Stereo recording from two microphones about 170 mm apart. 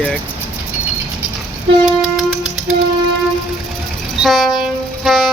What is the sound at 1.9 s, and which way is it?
Music, centre (ahead or behind).